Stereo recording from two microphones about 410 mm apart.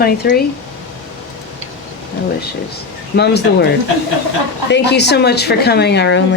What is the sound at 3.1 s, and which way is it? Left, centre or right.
Speech, left.